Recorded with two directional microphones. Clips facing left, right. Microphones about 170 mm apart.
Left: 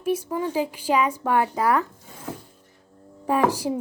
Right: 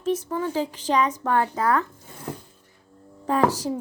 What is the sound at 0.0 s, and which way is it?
Speech, 10° left (ahead or behind).